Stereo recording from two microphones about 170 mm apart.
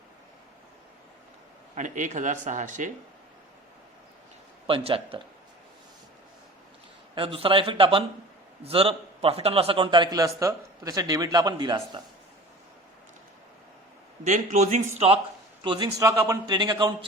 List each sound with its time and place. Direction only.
1.7 s a man's voice: 45° right (ahead or behind)
4.6 s speech: 35° right (ahead or behind)
7.2 s a man's voice: 30° right (ahead or behind)
14.3 s a man's voice: 45° right (ahead or behind)
15.6 s a man's voice: 25° right (ahead or behind)